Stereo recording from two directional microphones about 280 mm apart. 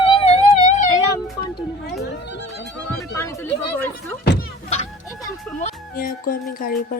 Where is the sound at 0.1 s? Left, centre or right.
Left.